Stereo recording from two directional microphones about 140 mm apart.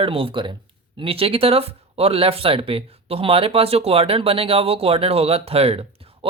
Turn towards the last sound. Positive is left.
turn(degrees=-45)  # may be behind; listen again after turning